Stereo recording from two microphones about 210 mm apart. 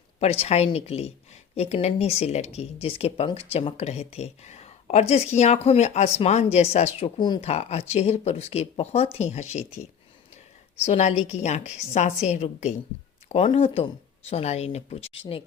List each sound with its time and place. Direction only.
0.2 s a woman's voice: 30° left (ahead or behind)
10.8 s a woman's voice: 30° left (ahead or behind)